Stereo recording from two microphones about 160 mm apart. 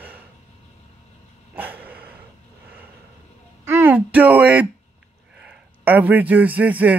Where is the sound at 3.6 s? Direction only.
15° right (ahead or behind).